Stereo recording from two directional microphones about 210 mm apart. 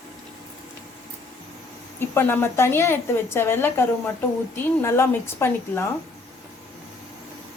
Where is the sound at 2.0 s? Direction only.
10° left (ahead or behind).